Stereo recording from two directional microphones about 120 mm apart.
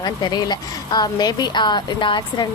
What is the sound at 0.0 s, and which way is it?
A woman's voice, 35° left (ahead or behind).